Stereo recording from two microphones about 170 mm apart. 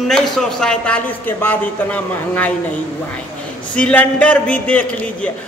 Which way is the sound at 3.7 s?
10° left (ahead or behind).